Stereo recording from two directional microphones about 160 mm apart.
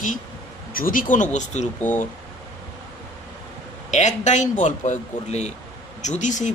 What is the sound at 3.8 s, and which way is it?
A man's voice, 50° left (ahead or behind).